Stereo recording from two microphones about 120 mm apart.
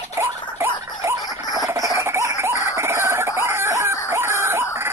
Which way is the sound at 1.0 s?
30° right (ahead or behind).